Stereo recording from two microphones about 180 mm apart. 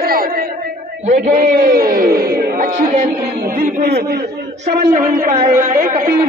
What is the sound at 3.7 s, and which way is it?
Speech, 60° right (ahead or behind).